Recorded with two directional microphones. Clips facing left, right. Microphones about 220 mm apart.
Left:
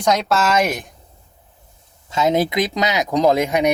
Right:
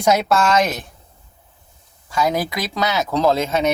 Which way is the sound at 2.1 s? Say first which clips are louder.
Left 3 dB; 20° left (ahead or behind).